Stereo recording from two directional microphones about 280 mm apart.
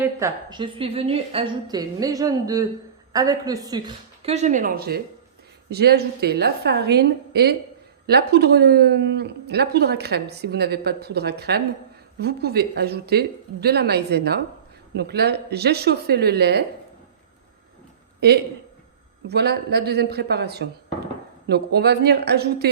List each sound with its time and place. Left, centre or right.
0.0 s a woman's voice: centre; by 16.6 s right
18.2 s a woman's voice: right